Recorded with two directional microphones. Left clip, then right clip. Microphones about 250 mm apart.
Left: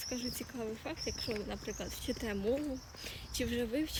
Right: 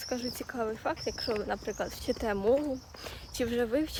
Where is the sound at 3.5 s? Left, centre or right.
Right.